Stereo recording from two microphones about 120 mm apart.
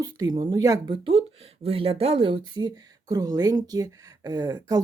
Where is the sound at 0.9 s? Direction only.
50° right (ahead or behind).